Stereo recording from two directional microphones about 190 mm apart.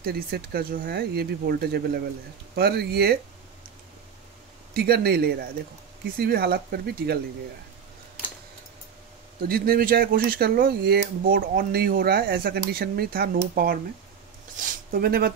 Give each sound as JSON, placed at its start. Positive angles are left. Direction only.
{"t": 0.0, "sound": "speech", "side_deg": -55}
{"t": 4.7, "sound": "speech", "side_deg": -55}
{"t": 9.4, "sound": "speech", "side_deg": -50}